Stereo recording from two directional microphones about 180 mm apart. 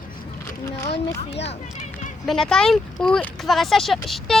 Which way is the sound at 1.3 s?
75° left (ahead or behind).